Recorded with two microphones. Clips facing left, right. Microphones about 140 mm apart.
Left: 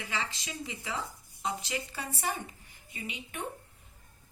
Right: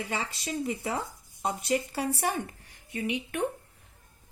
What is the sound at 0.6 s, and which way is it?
Speech, 50° right (ahead or behind).